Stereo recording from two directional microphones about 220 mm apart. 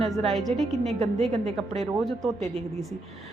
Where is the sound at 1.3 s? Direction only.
30° right (ahead or behind).